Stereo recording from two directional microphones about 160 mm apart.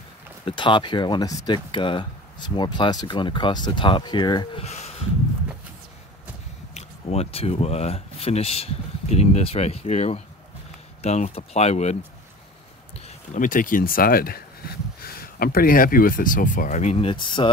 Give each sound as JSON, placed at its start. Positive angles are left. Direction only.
{"t": 0.5, "sound": "speech", "side_deg": 30}
{"t": 4.6, "sound": "a sound", "side_deg": 45}
{"t": 6.7, "sound": "speech", "side_deg": 40}
{"t": 13.3, "sound": "speech", "side_deg": 55}